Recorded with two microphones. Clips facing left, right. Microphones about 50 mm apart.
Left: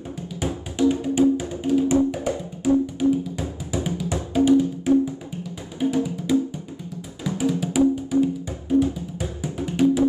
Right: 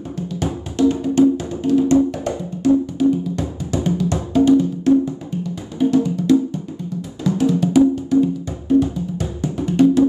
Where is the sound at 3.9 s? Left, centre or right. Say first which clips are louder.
Right 6 dB; centre.